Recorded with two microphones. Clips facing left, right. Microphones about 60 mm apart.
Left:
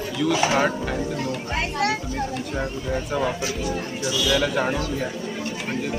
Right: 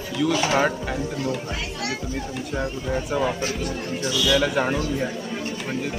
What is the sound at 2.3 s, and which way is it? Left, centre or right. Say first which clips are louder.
Speech: even; centre.